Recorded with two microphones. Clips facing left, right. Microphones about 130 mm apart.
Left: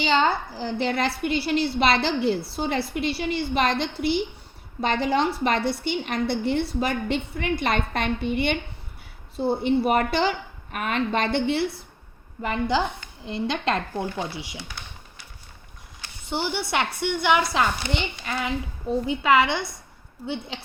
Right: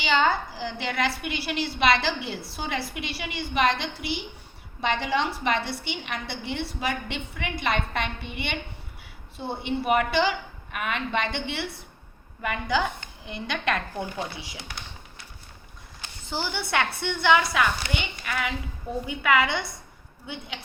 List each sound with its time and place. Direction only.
0.0 s a woman's voice: 35° left (ahead or behind)
16.3 s a woman's voice: 20° left (ahead or behind)
17.5 s a woman's voice: 30° left (ahead or behind)